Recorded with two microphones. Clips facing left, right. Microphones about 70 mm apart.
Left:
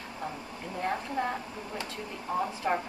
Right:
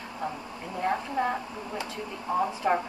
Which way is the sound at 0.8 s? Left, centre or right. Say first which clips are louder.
Right 4 dB; centre.